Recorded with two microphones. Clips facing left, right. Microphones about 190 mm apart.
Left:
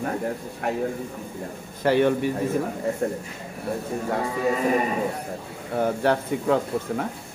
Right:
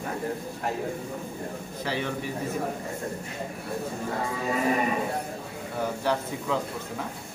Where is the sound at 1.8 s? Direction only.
55° left (ahead or behind).